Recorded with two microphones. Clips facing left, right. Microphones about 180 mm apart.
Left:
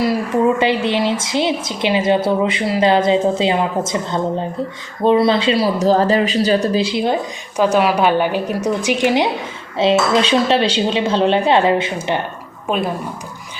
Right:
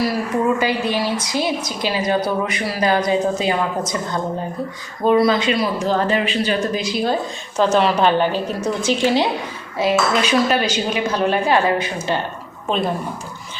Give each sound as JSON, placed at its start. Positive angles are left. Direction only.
{"t": 0.6, "sound": "speech", "side_deg": 25}
{"t": 12.6, "sound": "speech", "side_deg": 10}